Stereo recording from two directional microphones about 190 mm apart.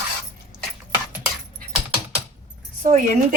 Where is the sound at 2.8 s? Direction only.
40° right (ahead or behind).